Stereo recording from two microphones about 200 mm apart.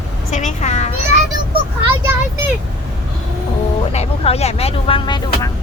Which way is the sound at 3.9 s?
30° left (ahead or behind).